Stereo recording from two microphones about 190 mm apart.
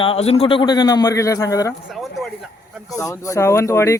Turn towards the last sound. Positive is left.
turn(degrees=15)  # may be behind; listen again after turning